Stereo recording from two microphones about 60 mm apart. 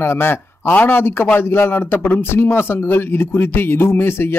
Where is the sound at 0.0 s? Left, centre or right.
Left.